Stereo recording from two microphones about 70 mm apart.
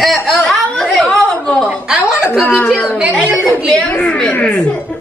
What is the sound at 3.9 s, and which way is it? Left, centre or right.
Speech, centre.